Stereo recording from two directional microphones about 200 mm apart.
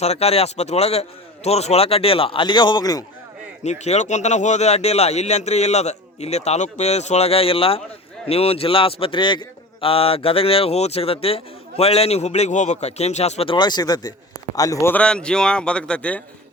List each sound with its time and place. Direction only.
0.0 s a man's voice: 30° left (ahead or behind)
3.6 s a man's voice: 35° left (ahead or behind); by 16.2 s 5° left (ahead or behind)